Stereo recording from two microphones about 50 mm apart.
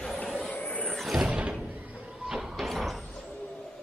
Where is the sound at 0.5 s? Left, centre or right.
Left.